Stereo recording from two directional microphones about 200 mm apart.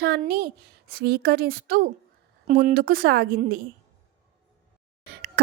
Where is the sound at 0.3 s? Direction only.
50° right (ahead or behind).